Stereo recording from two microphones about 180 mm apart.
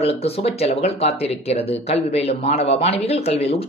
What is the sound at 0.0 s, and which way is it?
Speech, 35° left (ahead or behind).